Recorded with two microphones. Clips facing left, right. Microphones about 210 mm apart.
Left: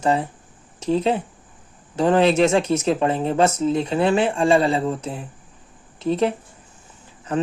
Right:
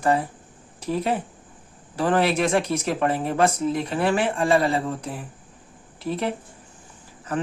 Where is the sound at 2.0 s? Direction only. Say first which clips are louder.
Left 5 dB; 25° left (ahead or behind).